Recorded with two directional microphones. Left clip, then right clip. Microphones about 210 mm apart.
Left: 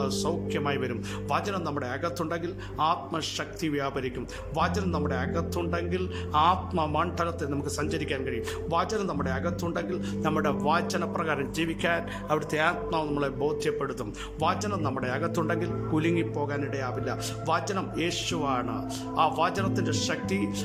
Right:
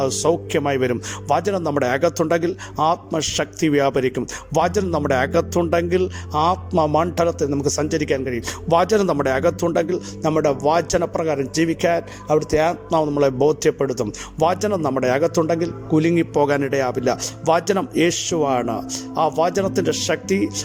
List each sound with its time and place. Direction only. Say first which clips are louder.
0.0 s speech: right 10 dB; 35° right (ahead or behind)
16.3 s speech: right 13 dB; 40° right (ahead or behind)